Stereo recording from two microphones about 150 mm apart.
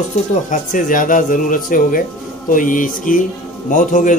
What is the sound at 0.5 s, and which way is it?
A man's voice, 60° left (ahead or behind).